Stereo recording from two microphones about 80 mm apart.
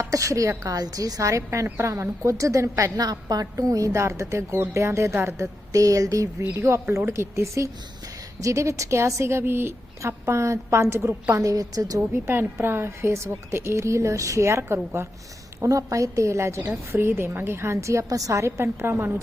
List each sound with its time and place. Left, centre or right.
0.0 s a woman's voice: right